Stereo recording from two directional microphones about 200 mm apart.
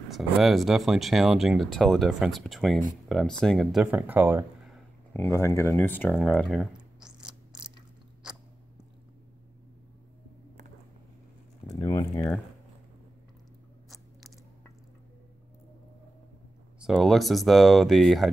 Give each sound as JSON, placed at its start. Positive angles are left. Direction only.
{"t": 0.1, "sound": "speech", "side_deg": 0}
{"t": 5.1, "sound": "speech", "side_deg": 15}
{"t": 11.8, "sound": "speech", "side_deg": 20}
{"t": 16.8, "sound": "speech", "side_deg": 0}